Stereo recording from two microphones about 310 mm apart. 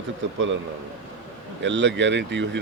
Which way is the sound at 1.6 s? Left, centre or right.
Right.